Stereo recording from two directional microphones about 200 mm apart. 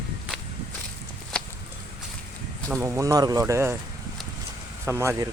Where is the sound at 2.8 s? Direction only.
15° right (ahead or behind).